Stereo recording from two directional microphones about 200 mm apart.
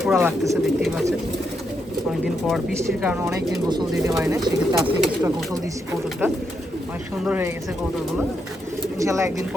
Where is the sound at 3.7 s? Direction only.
20° right (ahead or behind).